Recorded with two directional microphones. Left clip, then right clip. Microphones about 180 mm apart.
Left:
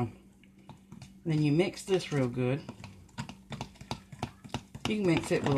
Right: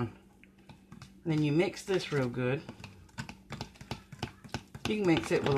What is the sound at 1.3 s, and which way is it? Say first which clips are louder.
Speech: left 1 dB; 15° right (ahead or behind).